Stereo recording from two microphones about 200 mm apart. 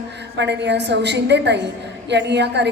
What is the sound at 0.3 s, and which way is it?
A woman's voice, 60° right (ahead or behind).